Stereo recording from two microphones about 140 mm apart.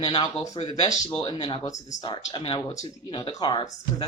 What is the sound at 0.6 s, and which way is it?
Speech, 45° left (ahead or behind).